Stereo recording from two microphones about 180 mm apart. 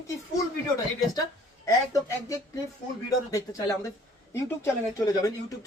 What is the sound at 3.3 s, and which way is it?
Speech, 20° left (ahead or behind).